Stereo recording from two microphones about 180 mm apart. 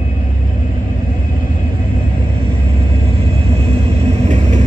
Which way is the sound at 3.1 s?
35° right (ahead or behind).